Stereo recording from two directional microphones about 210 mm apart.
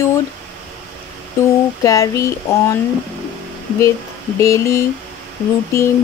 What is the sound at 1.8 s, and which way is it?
Speech, 15° left (ahead or behind).